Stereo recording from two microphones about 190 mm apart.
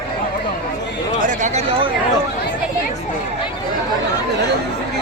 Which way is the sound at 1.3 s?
40° right (ahead or behind).